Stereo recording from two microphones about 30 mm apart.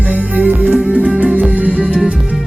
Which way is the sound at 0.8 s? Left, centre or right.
Right.